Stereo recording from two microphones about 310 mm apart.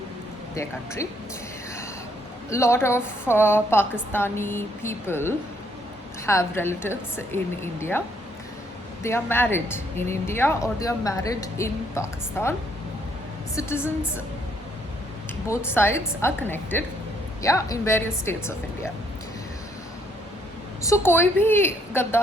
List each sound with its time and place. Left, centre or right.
0.5 s speech: centre
2.5 s speech: centre
9.0 s speech: centre
13.6 s speech: centre
15.4 s speech: centre
20.8 s speech: centre